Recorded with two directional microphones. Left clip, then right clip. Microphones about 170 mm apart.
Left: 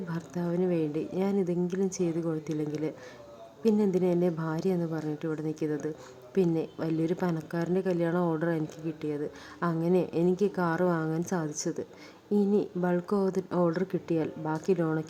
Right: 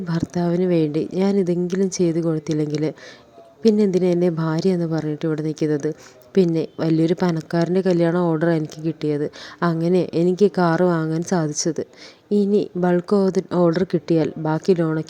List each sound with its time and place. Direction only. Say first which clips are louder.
0.1 s a woman's voice: right 12 dB; 30° right (ahead or behind)